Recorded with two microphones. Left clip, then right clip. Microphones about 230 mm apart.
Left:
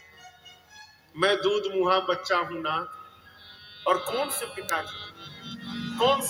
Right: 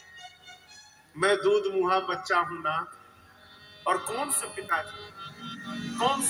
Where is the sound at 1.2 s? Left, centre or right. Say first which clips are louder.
Even; left.